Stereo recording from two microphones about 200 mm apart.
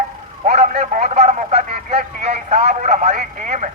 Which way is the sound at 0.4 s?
35° right (ahead or behind).